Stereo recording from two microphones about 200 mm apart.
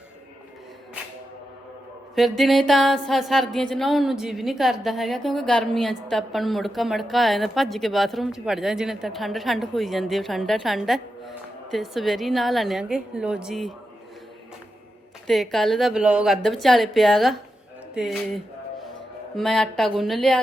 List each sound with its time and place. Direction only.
2.1 s speech: centre (ahead or behind)
15.3 s speech: centre (ahead or behind)
19.4 s speech: centre (ahead or behind)